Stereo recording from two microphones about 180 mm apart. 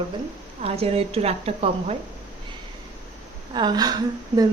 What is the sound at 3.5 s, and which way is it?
Speech, 25° right (ahead or behind).